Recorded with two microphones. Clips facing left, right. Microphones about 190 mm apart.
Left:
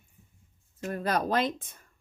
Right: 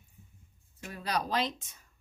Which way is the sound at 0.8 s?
50° left (ahead or behind).